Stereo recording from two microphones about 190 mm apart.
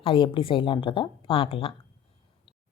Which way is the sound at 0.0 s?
25° left (ahead or behind).